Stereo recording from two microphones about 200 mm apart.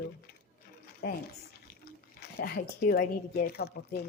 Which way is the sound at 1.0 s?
50° left (ahead or behind).